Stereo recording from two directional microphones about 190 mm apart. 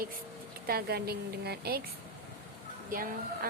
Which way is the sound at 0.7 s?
55° right (ahead or behind).